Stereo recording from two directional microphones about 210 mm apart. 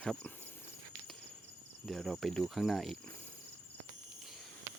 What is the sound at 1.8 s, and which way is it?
Speech, centre (ahead or behind).